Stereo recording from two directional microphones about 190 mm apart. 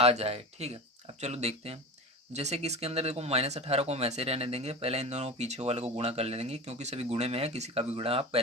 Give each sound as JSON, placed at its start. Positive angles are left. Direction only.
{"t": 0.0, "sound": "speech", "side_deg": -35}